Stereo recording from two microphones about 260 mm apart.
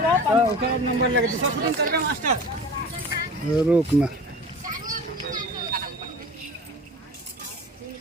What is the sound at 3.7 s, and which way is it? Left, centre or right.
Speech, centre.